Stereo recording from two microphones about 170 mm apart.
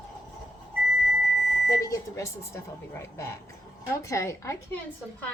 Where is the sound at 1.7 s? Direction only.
20° left (ahead or behind).